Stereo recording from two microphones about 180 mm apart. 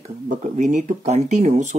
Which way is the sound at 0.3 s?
45° right (ahead or behind).